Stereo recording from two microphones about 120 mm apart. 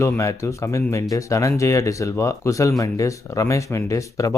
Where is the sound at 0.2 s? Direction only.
25° left (ahead or behind).